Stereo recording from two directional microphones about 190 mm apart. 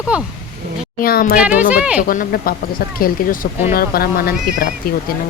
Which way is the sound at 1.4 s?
5° right (ahead or behind).